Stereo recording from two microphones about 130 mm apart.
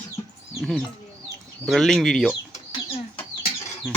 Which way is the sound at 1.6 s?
Centre (ahead or behind).